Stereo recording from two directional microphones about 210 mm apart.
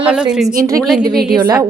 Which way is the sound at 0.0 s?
5° right (ahead or behind).